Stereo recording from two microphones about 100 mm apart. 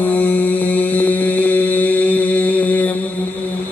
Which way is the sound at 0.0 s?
15° left (ahead or behind).